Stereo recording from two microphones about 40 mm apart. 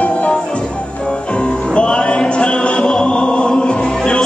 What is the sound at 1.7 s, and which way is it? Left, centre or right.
Music, left.